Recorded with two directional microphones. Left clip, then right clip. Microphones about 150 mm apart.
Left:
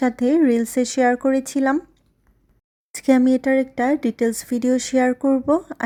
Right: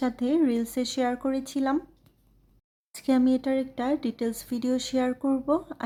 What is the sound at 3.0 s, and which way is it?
Speech, 35° left (ahead or behind).